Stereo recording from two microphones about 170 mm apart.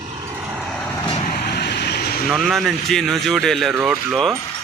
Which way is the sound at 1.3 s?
65° left (ahead or behind).